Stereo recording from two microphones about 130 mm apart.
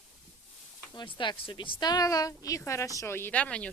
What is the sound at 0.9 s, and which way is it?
A woman's voice, 40° left (ahead or behind).